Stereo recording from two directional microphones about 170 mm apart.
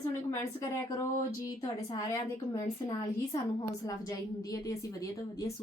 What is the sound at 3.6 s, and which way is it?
A woman's voice, 20° left (ahead or behind).